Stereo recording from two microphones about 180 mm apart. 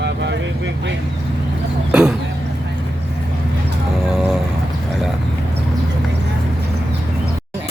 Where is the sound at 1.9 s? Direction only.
5° right (ahead or behind).